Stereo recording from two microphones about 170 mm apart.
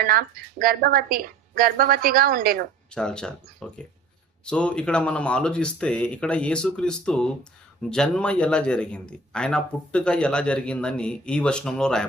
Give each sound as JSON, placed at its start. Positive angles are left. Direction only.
{"t": 0.0, "sound": "a woman's voice", "side_deg": -60}
{"t": 2.9, "sound": "a man's voice", "side_deg": 5}